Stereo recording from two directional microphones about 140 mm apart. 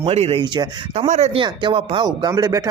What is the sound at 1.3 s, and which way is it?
Speech, 35° right (ahead or behind).